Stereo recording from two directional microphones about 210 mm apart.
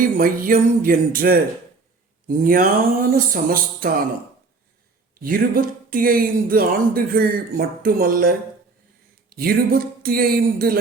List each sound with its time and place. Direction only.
0.2 s speech: 40° right (ahead or behind)
5.2 s speech: 45° right (ahead or behind)
9.3 s speech: 45° right (ahead or behind)